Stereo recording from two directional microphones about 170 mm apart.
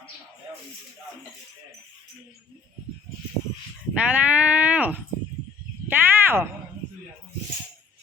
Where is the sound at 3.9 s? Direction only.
10° right (ahead or behind).